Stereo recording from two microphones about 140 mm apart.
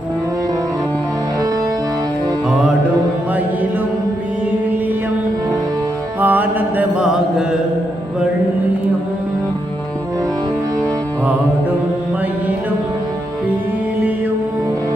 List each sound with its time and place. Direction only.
6.1 s mantra: 15° right (ahead or behind)